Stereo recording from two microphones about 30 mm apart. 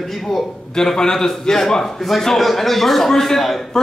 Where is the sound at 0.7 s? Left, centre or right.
Left.